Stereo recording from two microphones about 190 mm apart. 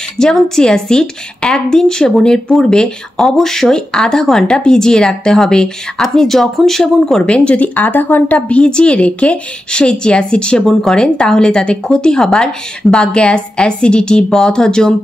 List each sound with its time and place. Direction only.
0.2 s a woman's voice: 5° left (ahead or behind)